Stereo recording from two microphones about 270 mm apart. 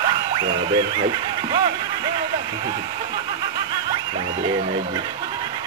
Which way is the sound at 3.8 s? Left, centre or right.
Centre.